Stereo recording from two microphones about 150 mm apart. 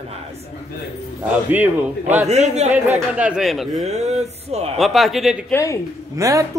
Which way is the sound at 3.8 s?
50° right (ahead or behind).